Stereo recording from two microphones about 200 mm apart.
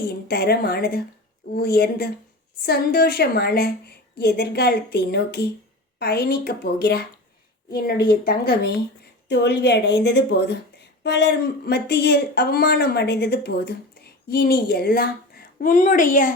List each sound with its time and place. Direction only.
0.3 s a woman's voice: 50° left (ahead or behind)